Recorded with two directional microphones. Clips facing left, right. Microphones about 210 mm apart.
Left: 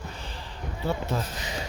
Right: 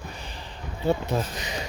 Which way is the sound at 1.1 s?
15° right (ahead or behind).